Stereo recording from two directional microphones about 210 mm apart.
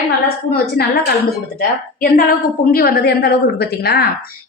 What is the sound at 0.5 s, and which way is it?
A woman's voice, 50° left (ahead or behind).